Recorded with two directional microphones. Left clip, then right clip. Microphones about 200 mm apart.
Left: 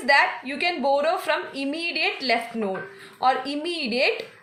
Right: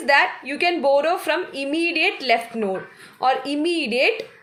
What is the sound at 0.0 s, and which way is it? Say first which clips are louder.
A woman's voice: right 2 dB; 35° right (ahead or behind).